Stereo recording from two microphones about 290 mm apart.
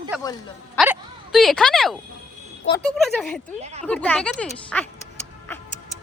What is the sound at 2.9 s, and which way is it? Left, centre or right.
Speech, centre.